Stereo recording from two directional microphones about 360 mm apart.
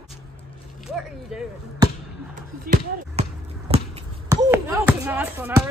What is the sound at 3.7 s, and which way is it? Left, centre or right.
Speech, centre.